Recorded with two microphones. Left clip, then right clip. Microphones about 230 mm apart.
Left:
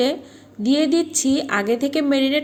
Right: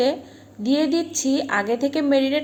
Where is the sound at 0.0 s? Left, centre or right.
Left.